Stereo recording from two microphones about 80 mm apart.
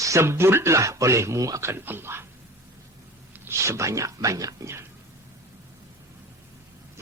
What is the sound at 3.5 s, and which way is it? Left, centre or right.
Speech, right.